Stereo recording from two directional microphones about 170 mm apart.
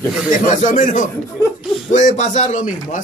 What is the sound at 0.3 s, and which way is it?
A man's voice, 50° left (ahead or behind).